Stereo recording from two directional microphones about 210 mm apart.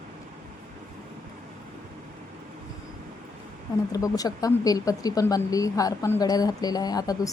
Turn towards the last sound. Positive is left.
turn(degrees=15)  # may be behind; listen again after turning